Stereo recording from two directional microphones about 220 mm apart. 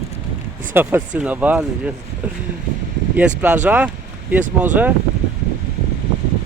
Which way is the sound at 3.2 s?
5° right (ahead or behind).